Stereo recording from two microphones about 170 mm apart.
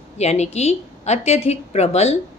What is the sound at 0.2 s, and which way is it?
A woman's voice, 40° left (ahead or behind).